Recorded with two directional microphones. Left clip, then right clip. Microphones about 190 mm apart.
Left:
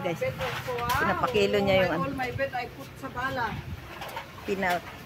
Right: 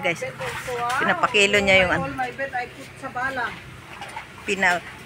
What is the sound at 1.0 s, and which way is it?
Speech, 5° right (ahead or behind).